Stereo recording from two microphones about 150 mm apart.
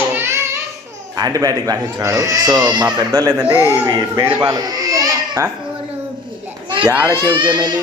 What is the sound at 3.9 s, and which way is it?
Speech, 30° right (ahead or behind).